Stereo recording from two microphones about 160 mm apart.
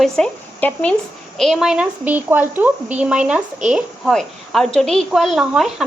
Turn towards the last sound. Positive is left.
turn(degrees=0)  # may be behind; listen again after turning